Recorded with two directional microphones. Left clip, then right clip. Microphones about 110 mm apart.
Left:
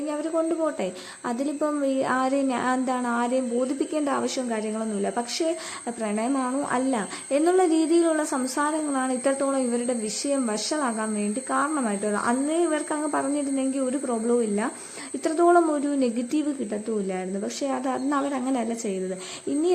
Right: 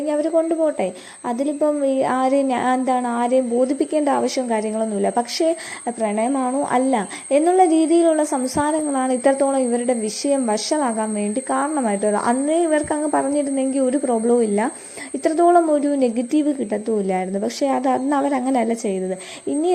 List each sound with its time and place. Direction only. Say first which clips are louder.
0.1 s speech: right 8 dB; 35° right (ahead or behind)
15.2 s speech: right 5 dB; 30° right (ahead or behind)
17.1 s a woman's voice: right 8 dB; 45° right (ahead or behind)